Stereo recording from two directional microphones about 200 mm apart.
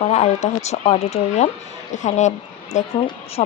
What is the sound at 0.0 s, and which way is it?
Speech, 35° left (ahead or behind).